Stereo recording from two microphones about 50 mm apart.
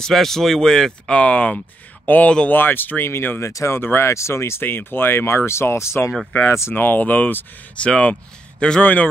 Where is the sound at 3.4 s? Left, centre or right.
Left.